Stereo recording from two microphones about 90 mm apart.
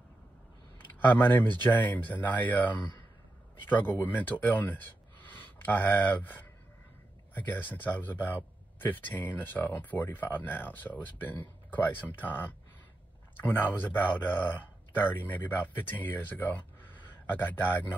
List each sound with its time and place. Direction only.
0.7 s speech: 20° left (ahead or behind)
13.4 s speech: 20° left (ahead or behind)